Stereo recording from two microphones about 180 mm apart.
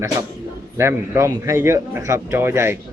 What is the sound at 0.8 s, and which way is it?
Speech, 15° right (ahead or behind).